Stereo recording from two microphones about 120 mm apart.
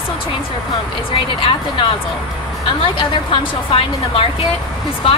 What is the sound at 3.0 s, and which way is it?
Speech, 45° left (ahead or behind).